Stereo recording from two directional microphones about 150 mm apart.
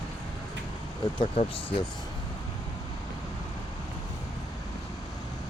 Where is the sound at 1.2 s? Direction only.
35° left (ahead or behind).